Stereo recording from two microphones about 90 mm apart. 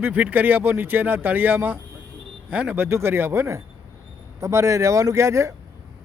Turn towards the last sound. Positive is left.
turn(degrees=-35)  # may be behind; listen again after turning